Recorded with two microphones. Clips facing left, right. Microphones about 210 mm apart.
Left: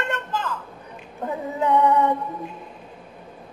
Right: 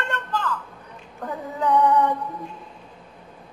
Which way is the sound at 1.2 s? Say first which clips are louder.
Left 2 dB; 25° left (ahead or behind).